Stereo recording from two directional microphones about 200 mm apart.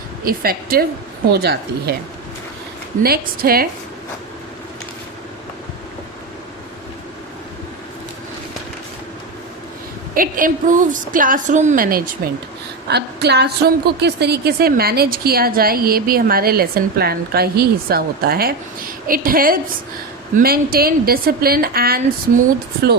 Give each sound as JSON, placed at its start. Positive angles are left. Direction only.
{"t": 0.3, "sound": "a woman's voice", "side_deg": -50}
{"t": 3.0, "sound": "a woman's voice", "side_deg": -50}
{"t": 10.2, "sound": "a woman's voice", "side_deg": -45}
{"t": 12.9, "sound": "a woman's voice", "side_deg": -55}